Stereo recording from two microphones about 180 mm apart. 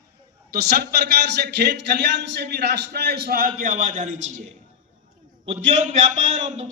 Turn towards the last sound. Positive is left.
turn(degrees=-40)  # may be behind; listen again after turning